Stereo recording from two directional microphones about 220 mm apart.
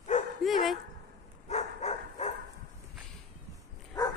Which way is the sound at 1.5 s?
30° left (ahead or behind).